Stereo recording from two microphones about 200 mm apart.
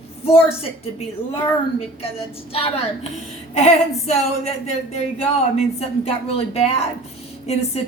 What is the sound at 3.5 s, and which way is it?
A woman's voice, 30° left (ahead or behind).